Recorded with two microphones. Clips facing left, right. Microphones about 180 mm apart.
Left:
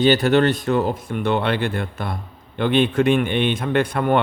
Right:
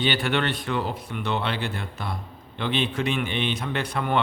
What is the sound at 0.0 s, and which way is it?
A man's voice, 40° left (ahead or behind).